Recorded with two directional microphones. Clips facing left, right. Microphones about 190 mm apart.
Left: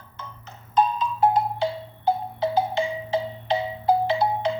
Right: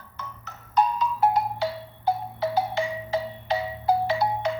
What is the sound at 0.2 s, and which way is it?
Music, 25° left (ahead or behind).